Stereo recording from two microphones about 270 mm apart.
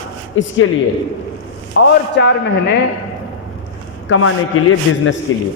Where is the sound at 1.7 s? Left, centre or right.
Left.